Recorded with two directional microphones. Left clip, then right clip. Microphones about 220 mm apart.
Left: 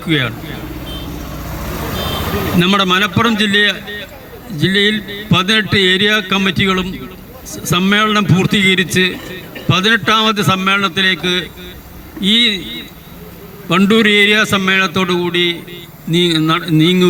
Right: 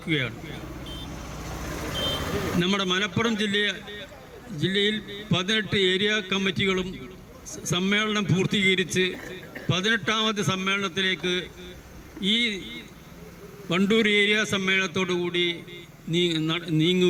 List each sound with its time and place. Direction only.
0.0 s a man's voice: 20° left (ahead or behind)
2.6 s a man's voice: 25° left (ahead or behind)